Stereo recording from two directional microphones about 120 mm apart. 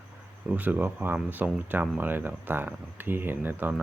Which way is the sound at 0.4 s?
10° right (ahead or behind).